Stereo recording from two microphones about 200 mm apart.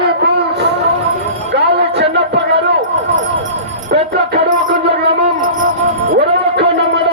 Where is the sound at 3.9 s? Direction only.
55° right (ahead or behind).